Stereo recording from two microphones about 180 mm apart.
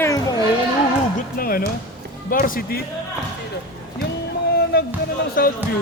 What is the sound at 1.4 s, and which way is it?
Speech, 55° left (ahead or behind).